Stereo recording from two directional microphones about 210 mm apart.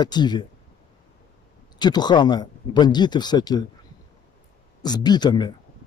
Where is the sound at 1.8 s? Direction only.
20° left (ahead or behind).